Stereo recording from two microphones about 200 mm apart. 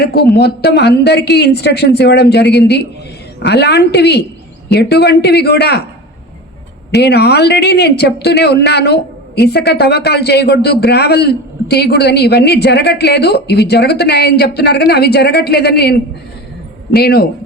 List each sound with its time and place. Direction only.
0.0 s a man's voice: 50° left (ahead or behind)
6.9 s a man's voice: 55° left (ahead or behind)